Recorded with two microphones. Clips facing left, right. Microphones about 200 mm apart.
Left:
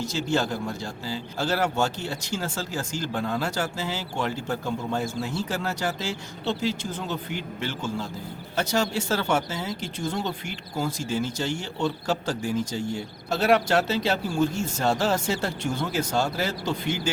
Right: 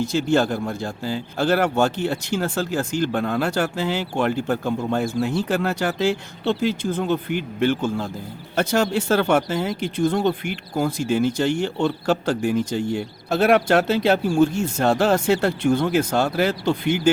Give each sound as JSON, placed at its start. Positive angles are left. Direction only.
{"t": 0.0, "sound": "speech", "side_deg": -55}